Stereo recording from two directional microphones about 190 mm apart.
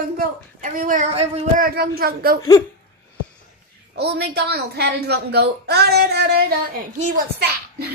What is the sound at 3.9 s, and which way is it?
A woman's voice, 60° right (ahead or behind).